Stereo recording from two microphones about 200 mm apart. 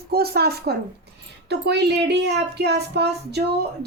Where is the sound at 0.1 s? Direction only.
50° right (ahead or behind).